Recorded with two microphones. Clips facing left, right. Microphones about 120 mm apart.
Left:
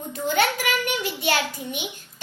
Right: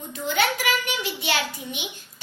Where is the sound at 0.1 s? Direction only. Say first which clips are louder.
Left 2 dB; 45° left (ahead or behind).